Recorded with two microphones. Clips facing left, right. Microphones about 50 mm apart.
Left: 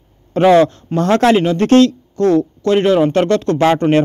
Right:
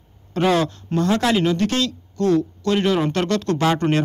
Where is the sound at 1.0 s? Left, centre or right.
Left.